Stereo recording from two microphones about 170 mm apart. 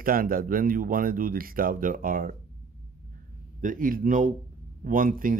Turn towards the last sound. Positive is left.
turn(degrees=-55)  # may be behind; listen again after turning